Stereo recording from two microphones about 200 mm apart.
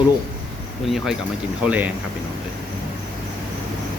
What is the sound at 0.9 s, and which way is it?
Speech, centre (ahead or behind).